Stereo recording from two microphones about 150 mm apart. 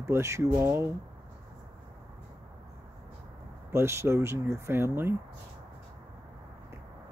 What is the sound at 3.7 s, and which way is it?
Speech, 15° right (ahead or behind).